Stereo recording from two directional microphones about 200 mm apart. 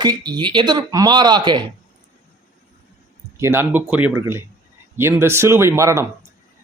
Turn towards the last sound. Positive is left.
turn(degrees=-15)  # may be behind; listen again after turning